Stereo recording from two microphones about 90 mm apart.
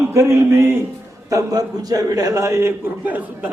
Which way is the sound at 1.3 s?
40° right (ahead or behind).